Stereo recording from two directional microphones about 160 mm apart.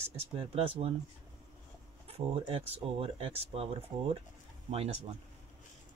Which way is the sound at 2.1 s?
35° right (ahead or behind).